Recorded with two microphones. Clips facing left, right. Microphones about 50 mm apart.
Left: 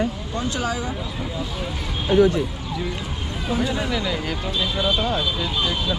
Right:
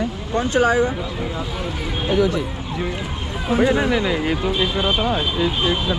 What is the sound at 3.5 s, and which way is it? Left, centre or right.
Speech, right.